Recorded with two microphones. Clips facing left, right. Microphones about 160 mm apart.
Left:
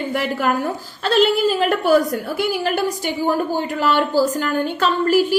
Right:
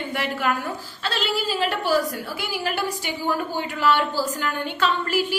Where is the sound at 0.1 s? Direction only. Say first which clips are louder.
Left 4 dB; 45° left (ahead or behind).